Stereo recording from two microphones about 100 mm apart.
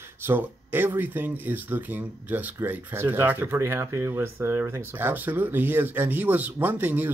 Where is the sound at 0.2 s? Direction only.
20° right (ahead or behind).